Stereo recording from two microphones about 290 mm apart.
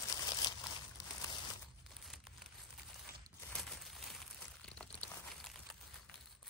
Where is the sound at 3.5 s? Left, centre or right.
Centre.